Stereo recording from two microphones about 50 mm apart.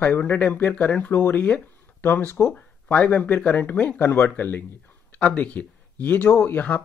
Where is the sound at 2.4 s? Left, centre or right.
Left.